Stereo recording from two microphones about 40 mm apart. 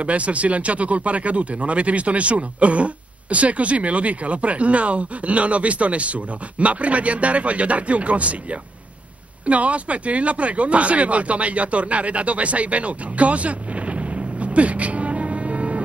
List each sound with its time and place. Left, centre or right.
0.0 s speech: right